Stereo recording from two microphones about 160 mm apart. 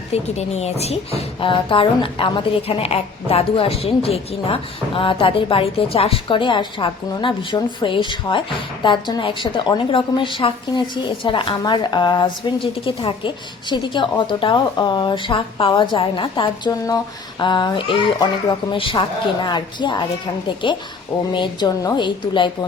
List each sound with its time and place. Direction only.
0.1 s a woman's voice: 45° left (ahead or behind)